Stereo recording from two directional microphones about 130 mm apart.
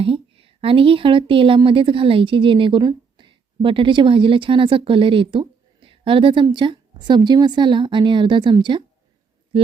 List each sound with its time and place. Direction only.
0.0 s a woman's voice: 45° right (ahead or behind)